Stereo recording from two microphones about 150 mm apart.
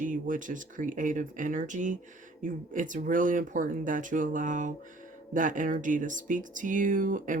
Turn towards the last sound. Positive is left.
turn(degrees=-60)  # may be behind; listen again after turning